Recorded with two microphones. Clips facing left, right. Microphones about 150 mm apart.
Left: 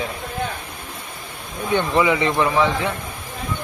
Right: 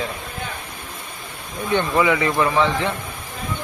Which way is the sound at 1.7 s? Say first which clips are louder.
Even; 20° left (ahead or behind).